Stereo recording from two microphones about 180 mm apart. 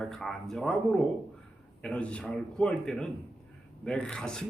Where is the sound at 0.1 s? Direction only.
Centre (ahead or behind).